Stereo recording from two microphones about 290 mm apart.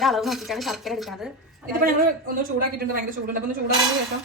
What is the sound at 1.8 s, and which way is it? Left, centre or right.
Speech, right.